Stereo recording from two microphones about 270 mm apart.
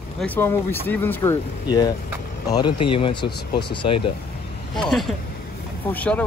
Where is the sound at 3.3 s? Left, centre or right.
Left.